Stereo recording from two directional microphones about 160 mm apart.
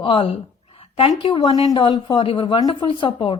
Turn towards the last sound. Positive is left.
turn(degrees=30)  # may be behind; listen again after turning